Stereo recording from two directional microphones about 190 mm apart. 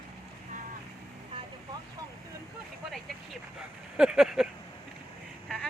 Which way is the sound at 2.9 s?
Centre (ahead or behind).